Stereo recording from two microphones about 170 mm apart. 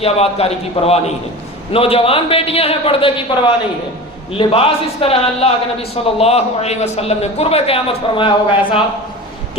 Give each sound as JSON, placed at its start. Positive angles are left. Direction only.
{"t": 0.0, "sound": "a man's voice", "side_deg": 35}